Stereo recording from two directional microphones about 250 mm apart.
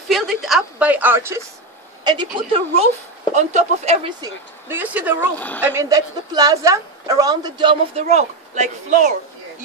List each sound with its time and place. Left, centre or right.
0.1 s a woman's voice: centre; by 4.3 s right
4.6 s a woman's voice: centre; by 9.1 s right